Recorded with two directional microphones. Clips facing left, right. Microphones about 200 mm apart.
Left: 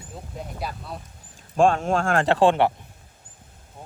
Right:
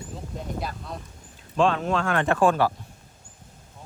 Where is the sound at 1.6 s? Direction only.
50° left (ahead or behind).